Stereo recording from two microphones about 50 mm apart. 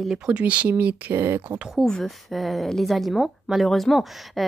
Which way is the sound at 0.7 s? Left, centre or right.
Right.